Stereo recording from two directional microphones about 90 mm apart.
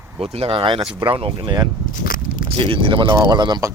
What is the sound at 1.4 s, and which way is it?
Speech, 45° right (ahead or behind).